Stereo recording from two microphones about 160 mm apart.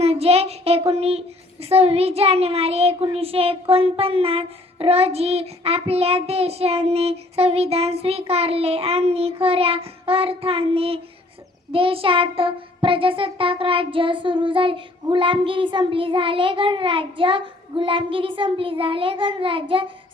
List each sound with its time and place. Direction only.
0.0 s child singing: 40° right (ahead or behind)